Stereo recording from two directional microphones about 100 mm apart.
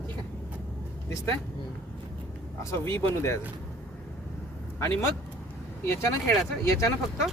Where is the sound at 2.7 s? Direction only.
25° left (ahead or behind).